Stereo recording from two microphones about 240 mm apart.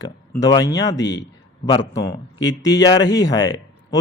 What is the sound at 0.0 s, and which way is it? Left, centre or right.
A man's voice, centre.